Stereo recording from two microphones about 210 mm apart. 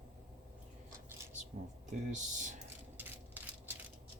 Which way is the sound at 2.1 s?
35° right (ahead or behind).